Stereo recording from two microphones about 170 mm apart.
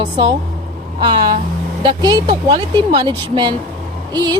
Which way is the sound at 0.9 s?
30° right (ahead or behind).